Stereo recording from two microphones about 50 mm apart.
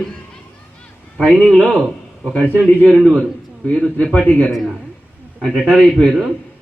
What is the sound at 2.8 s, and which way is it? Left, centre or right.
Speech, centre.